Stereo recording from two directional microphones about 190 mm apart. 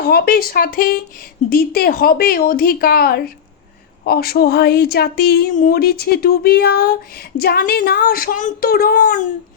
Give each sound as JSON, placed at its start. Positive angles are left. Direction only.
{"t": 0.0, "sound": "speech", "side_deg": 55}